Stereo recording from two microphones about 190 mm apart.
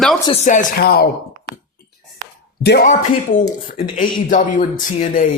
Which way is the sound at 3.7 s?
45° left (ahead or behind).